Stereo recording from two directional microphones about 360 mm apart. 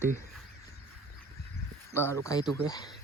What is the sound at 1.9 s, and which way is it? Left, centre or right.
Speech, centre.